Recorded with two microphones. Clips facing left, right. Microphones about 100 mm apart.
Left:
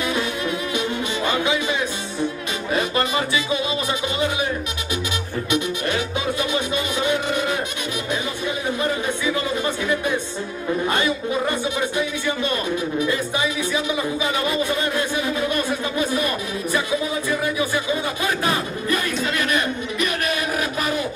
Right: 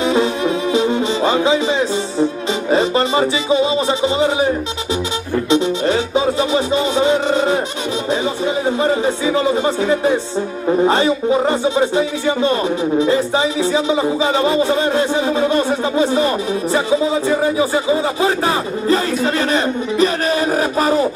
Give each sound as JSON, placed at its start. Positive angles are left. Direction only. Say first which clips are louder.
{"t": 0.0, "sound": "music", "louder": "right 8 dB", "side_deg": -25}
{"t": 2.7, "sound": "speech", "louder": "right 7 dB", "side_deg": -25}
{"t": 5.5, "sound": "music", "louder": "right 8 dB", "side_deg": -25}
{"t": 8.6, "sound": "a sound", "louder": "right 7 dB", "side_deg": -25}
{"t": 10.8, "sound": "speech", "louder": "right 8 dB", "side_deg": -25}